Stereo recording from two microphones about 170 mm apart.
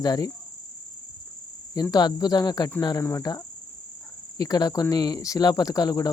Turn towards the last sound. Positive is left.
turn(degrees=20)  # may be behind; listen again after turning